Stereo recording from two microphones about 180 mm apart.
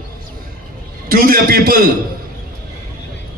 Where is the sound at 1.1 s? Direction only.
55° right (ahead or behind).